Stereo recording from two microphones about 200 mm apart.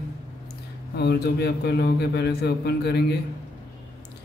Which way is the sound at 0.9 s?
55° left (ahead or behind).